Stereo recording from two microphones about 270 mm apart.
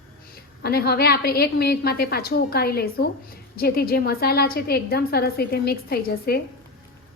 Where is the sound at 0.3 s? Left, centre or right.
Left.